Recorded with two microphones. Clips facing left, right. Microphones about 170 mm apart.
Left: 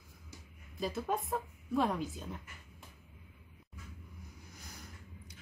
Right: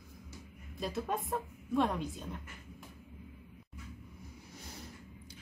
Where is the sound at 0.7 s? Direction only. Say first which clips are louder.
Left 1 dB; centre (ahead or behind).